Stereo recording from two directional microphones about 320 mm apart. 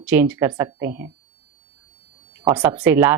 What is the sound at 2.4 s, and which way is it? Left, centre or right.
Speech, centre.